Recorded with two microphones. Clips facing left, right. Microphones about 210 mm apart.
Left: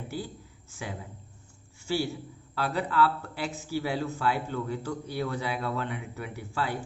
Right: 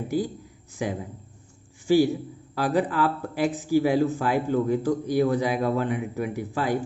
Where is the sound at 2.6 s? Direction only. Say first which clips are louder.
Right 4 dB; 15° right (ahead or behind).